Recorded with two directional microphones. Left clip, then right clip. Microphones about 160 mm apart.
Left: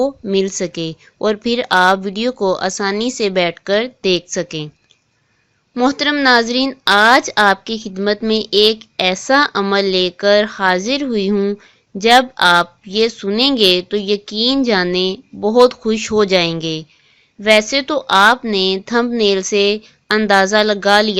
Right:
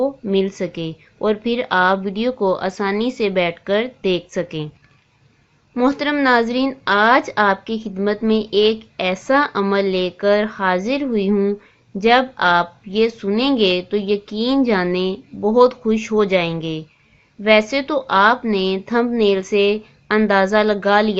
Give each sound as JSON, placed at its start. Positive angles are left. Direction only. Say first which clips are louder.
{"t": 0.0, "sound": "a woman's voice", "louder": "left 2 dB", "side_deg": 35}
{"t": 5.7, "sound": "a woman's voice", "louder": "left 3 dB", "side_deg": 35}